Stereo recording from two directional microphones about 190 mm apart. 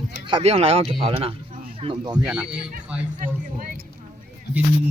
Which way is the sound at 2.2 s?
5° right (ahead or behind).